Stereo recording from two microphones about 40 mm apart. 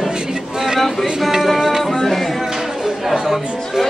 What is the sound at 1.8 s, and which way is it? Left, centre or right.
Music, centre.